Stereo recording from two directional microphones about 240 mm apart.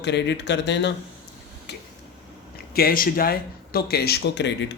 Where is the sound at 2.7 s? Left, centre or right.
Left.